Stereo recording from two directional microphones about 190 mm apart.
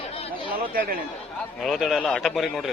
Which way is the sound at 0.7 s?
50° right (ahead or behind).